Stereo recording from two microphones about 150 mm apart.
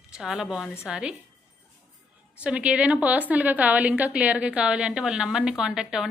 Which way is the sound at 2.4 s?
10° right (ahead or behind).